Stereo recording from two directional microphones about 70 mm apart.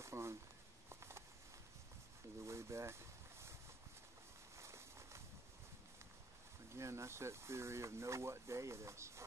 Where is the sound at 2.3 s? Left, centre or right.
Right.